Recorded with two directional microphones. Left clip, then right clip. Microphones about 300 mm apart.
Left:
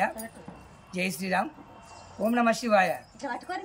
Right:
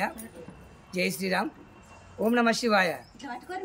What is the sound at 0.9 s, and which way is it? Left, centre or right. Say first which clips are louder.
Speech: even; centre.